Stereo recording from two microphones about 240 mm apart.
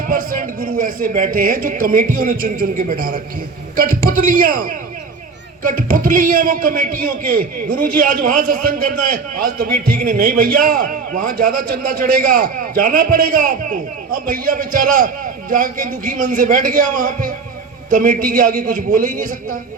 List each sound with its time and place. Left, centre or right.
0.1 s a man's voice: right